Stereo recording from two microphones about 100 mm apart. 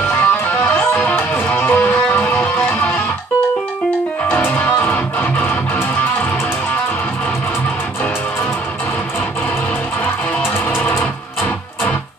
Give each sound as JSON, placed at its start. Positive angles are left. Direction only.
{"t": 0.1, "sound": "music", "side_deg": 15}
{"t": 4.3, "sound": "music", "side_deg": 15}
{"t": 10.4, "sound": "music", "side_deg": 15}